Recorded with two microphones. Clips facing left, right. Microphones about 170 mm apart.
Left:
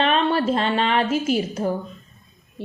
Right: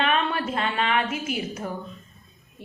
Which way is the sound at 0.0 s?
30° left (ahead or behind).